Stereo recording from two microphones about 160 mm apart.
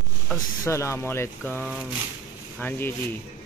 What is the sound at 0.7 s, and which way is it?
Speech, 15° left (ahead or behind).